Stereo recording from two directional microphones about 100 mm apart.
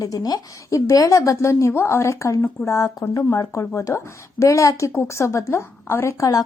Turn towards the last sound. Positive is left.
turn(degrees=35)  # may be behind; listen again after turning